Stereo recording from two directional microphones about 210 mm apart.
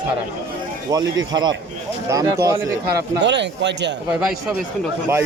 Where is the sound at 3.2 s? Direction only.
55° right (ahead or behind).